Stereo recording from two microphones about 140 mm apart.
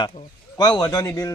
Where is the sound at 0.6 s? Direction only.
25° left (ahead or behind).